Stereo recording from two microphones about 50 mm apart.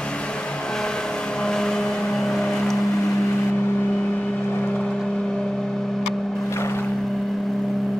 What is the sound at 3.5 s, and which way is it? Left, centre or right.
Vehicle, left.